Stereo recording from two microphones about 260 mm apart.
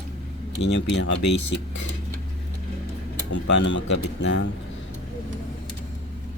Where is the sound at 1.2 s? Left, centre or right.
Left.